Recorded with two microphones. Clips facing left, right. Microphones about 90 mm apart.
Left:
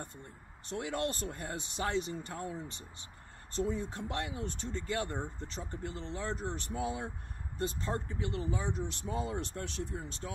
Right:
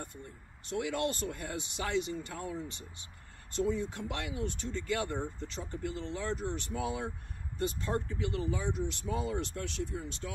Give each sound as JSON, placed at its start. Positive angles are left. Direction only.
{"t": 0.7, "sound": "speech", "side_deg": 35}
{"t": 3.6, "sound": "speech", "side_deg": 35}